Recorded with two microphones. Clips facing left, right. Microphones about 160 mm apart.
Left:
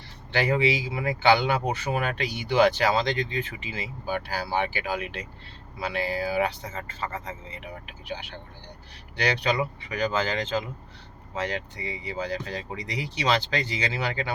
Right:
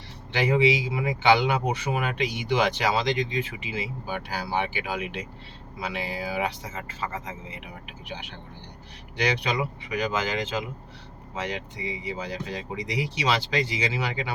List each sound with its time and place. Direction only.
0.3 s speech: 15° right (ahead or behind)
9.1 s speech: 15° right (ahead or behind)